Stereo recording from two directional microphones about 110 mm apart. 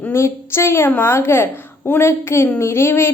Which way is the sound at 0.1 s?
25° left (ahead or behind).